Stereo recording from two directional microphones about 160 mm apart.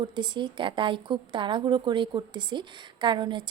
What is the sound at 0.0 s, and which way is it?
A woman's voice, 30° right (ahead or behind).